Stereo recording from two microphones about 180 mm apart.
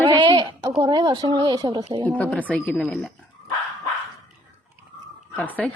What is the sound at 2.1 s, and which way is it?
Speech, 5° left (ahead or behind).